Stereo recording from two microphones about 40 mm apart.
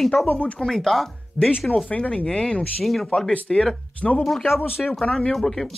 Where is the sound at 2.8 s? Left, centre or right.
Centre.